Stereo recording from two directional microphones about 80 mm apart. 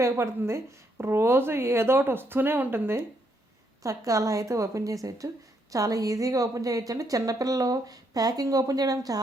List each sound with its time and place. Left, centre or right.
0.0 s a woman's voice: right
3.8 s a woman's voice: right